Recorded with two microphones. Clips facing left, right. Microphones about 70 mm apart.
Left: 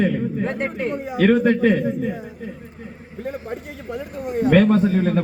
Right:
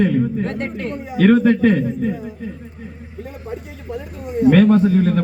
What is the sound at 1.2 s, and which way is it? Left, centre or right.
Speech, centre.